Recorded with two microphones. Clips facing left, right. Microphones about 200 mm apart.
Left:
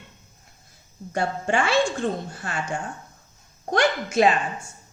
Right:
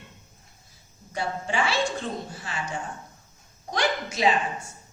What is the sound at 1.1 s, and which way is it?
A woman's voice, 50° left (ahead or behind).